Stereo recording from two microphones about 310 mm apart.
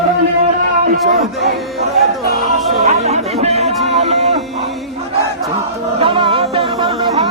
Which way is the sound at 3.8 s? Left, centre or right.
Centre.